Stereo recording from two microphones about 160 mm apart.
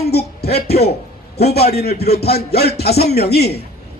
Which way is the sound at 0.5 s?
85° left.